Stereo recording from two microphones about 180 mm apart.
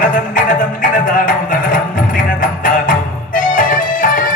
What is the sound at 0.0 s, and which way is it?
Music, 50° left (ahead or behind).